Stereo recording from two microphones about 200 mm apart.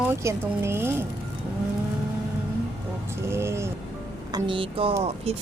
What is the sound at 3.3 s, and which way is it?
Speech, 15° right (ahead or behind).